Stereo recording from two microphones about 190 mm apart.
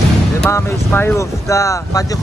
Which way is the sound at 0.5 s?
15° left (ahead or behind).